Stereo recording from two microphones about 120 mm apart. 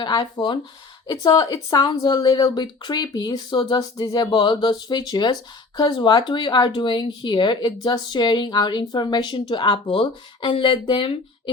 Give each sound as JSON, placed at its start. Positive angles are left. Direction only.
{"t": 0.0, "sound": "speech", "side_deg": 35}